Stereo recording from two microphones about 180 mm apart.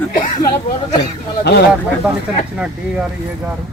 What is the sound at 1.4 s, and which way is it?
Speech, 65° left (ahead or behind).